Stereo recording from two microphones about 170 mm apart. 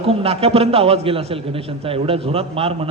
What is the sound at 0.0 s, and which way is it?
A man's voice, 35° right (ahead or behind).